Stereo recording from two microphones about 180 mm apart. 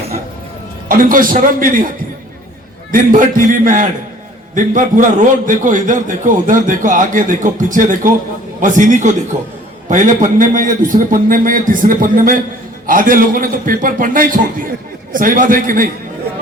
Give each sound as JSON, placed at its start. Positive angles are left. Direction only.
{"t": 0.9, "sound": "a man's voice", "side_deg": -50}
{"t": 2.9, "sound": "a man's voice", "side_deg": -50}